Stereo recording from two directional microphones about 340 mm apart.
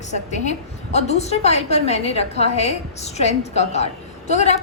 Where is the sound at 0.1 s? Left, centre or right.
Left.